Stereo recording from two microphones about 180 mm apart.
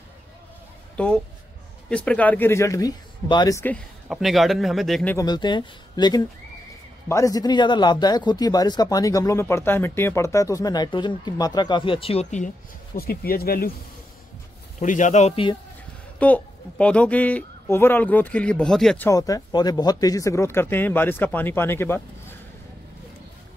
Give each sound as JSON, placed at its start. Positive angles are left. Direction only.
{"t": 0.9, "sound": "speech", "side_deg": 5}
{"t": 4.1, "sound": "a man's voice", "side_deg": 0}
{"t": 5.1, "sound": "a man's voice", "side_deg": 20}
{"t": 12.9, "sound": "speech", "side_deg": 55}
{"t": 14.8, "sound": "speech", "side_deg": 40}
{"t": 16.2, "sound": "speech", "side_deg": 10}
{"t": 19.0, "sound": "speech", "side_deg": 20}